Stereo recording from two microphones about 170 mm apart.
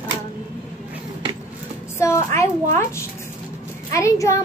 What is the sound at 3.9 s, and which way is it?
Speech, 15° left (ahead or behind).